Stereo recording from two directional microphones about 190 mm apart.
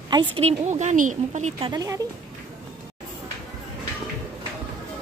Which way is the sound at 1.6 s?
20° right (ahead or behind).